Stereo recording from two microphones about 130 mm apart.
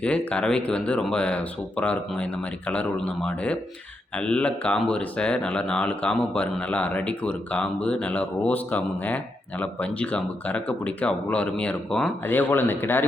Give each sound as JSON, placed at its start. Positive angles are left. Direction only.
{"t": 0.0, "sound": "a man's voice", "side_deg": 10}
{"t": 12.3, "sound": "a man's voice", "side_deg": 15}